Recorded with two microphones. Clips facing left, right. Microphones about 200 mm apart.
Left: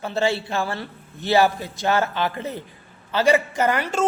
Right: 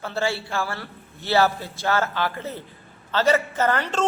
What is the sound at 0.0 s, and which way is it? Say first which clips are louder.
A man's voice: left 3 dB; 20° left (ahead or behind).